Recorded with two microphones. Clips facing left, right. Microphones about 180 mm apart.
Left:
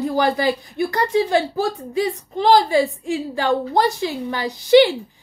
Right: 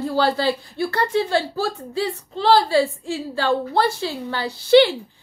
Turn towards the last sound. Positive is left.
turn(degrees=15)  # may be behind; listen again after turning